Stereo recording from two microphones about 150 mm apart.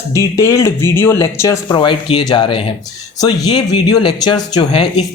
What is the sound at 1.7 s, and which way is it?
Speech, 30° left (ahead or behind).